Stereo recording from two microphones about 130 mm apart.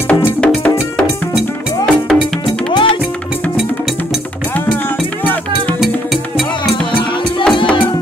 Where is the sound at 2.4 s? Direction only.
40° left (ahead or behind).